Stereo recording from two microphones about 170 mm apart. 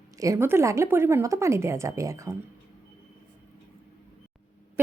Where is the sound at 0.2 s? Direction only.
15° right (ahead or behind).